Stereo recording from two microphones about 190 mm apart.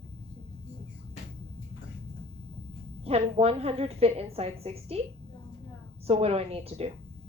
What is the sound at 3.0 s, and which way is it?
A woman's voice, 30° right (ahead or behind).